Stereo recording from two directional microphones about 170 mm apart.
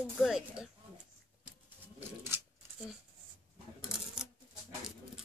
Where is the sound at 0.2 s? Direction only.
5° right (ahead or behind).